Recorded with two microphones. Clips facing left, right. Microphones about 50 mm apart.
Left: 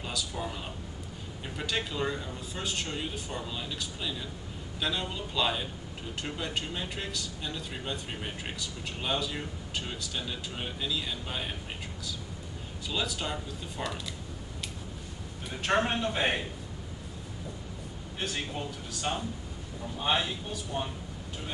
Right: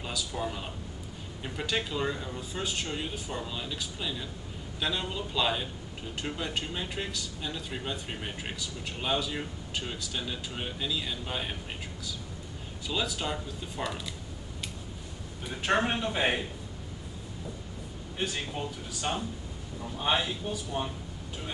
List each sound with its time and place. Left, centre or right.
0.0 s speech: centre
12.8 s speech: centre
15.6 s a man's voice: centre
18.2 s speech: centre